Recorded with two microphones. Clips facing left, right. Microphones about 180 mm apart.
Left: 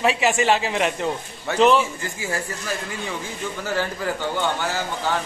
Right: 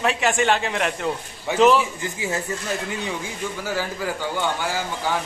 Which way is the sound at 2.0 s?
20° right (ahead or behind).